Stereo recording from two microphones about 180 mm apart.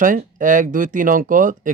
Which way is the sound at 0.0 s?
45° right (ahead or behind).